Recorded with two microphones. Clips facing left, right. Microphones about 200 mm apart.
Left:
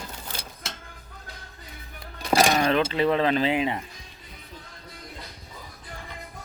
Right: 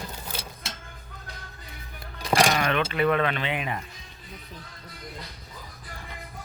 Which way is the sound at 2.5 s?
30° left (ahead or behind).